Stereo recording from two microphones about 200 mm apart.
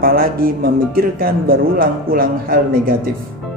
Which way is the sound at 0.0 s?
45° right (ahead or behind).